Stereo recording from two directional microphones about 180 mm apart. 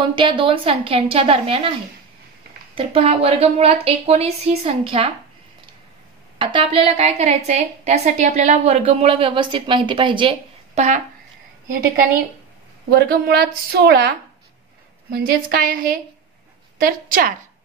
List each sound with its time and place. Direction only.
0.1 s a woman's voice: 25° right (ahead or behind)
2.7 s a woman's voice: 30° right (ahead or behind)
6.3 s a woman's voice: 30° right (ahead or behind)
12.9 s a woman's voice: 60° right (ahead or behind)